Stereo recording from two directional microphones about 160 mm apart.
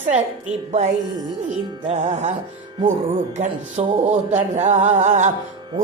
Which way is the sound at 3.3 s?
50° right (ahead or behind).